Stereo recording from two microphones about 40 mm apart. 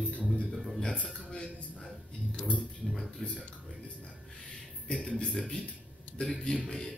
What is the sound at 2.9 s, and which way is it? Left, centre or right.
Speech, centre.